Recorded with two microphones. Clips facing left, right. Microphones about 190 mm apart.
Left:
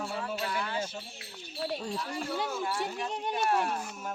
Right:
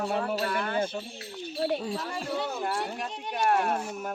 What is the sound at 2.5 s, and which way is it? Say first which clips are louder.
Speech: right 2 dB; 60° right (ahead or behind).